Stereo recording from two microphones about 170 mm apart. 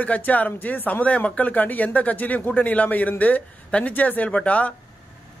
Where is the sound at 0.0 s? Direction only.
10° left (ahead or behind).